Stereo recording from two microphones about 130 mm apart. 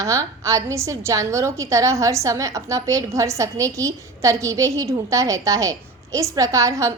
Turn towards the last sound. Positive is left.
turn(degrees=-25)  # may be behind; listen again after turning